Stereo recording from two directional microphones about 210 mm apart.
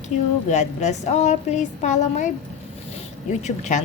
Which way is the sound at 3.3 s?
35° left (ahead or behind).